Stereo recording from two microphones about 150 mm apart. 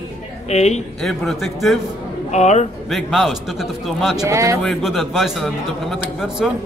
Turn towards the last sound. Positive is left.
turn(degrees=-5)  # may be behind; listen again after turning